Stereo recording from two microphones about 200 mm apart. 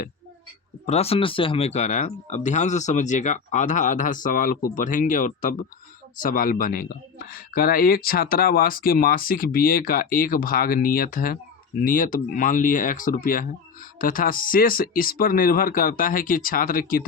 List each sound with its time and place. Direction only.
0.9 s speech: 30° left (ahead or behind)